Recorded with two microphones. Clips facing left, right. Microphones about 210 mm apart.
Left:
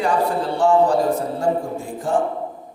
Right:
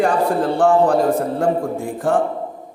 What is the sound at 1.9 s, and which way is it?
Mantra, 55° right (ahead or behind).